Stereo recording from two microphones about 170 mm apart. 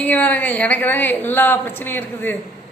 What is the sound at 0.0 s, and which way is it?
A woman's voice, 10° left (ahead or behind).